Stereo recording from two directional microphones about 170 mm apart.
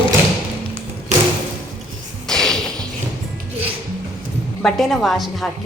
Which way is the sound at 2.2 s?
5° left (ahead or behind).